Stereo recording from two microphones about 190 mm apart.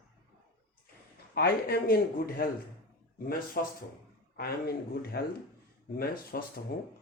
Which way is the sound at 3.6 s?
50° left (ahead or behind).